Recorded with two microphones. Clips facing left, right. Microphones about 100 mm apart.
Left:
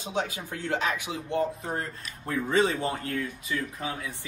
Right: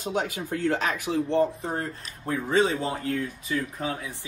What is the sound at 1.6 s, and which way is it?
Speech, 30° right (ahead or behind).